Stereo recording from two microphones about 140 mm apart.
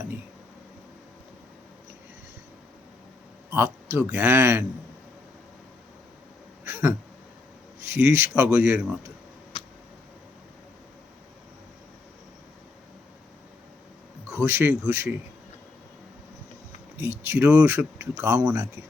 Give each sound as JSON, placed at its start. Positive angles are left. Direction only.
{"t": 3.5, "sound": "speech", "side_deg": -15}
{"t": 6.7, "sound": "a sound", "side_deg": -20}
{"t": 7.9, "sound": "speech", "side_deg": -15}
{"t": 14.3, "sound": "a man's voice", "side_deg": -20}
{"t": 17.2, "sound": "speech", "side_deg": -15}
{"t": 18.4, "sound": "a man's voice", "side_deg": -25}